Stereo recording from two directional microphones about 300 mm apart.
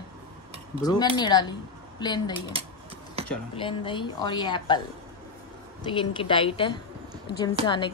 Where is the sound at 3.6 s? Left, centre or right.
Centre.